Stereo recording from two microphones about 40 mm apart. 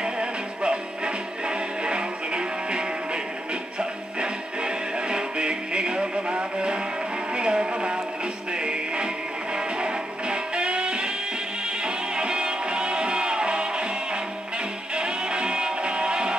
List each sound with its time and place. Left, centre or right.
0.0 s music: right
4.2 s music: right